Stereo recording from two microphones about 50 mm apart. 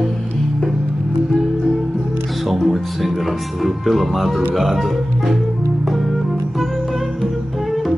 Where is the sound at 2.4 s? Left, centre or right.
Centre.